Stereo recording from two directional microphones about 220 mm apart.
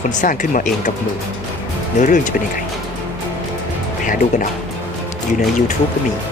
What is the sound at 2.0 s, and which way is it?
Speech, 35° left (ahead or behind).